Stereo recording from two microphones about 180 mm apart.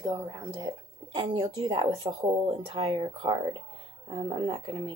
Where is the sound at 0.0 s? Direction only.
20° right (ahead or behind).